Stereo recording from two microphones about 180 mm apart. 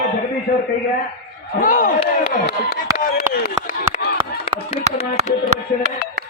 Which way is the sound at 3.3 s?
55° left (ahead or behind).